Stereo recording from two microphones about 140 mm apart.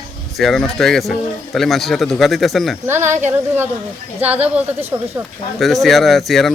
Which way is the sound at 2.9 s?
20° right (ahead or behind).